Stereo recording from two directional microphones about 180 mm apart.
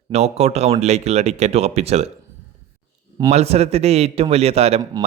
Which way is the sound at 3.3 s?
35° right (ahead or behind).